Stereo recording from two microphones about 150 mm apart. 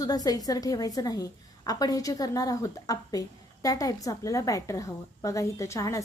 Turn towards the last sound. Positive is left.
turn(degrees=20)  # may be behind; listen again after turning